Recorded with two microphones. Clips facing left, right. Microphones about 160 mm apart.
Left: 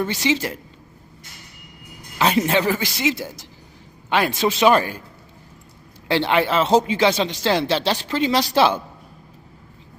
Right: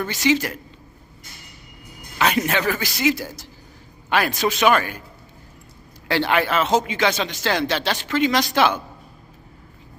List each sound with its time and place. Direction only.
0.0 s speech: 25° left (ahead or behind)
2.1 s speech: 30° left (ahead or behind)
6.1 s speech: 25° left (ahead or behind)